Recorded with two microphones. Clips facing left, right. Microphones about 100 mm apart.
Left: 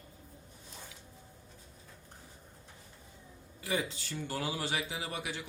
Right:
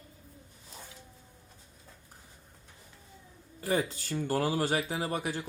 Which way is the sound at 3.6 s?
40° right (ahead or behind).